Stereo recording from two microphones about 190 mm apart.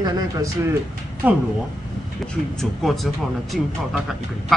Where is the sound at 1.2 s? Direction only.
5° right (ahead or behind).